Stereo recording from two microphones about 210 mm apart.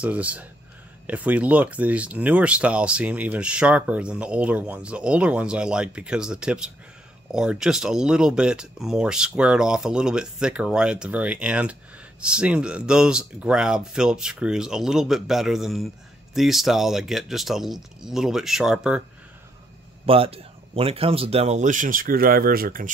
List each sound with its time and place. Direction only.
0.0 s speech: 5° right (ahead or behind)
20.1 s speech: 25° right (ahead or behind); by 22.8 s 45° right (ahead or behind)